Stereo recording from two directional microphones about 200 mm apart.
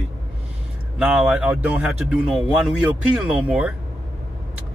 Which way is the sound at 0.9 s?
10° right (ahead or behind).